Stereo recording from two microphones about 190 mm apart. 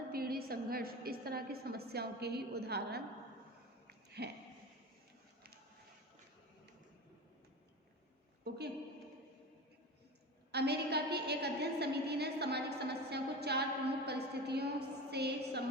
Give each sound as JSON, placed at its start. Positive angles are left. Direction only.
{"t": 0.1, "sound": "a woman's voice", "side_deg": -50}
{"t": 4.2, "sound": "a woman's voice", "side_deg": -60}
{"t": 10.5, "sound": "a woman's voice", "side_deg": -60}